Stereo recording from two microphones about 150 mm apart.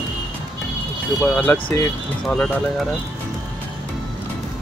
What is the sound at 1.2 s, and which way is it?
Speech, 10° left (ahead or behind).